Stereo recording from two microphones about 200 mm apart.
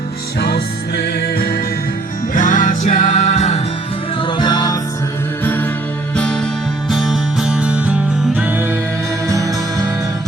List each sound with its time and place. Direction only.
0.3 s music: 50° left (ahead or behind); by 3.6 s 35° left (ahead or behind)
4.2 s music: 25° left (ahead or behind)
5.4 s music: 10° left (ahead or behind); by 9.8 s 15° right (ahead or behind)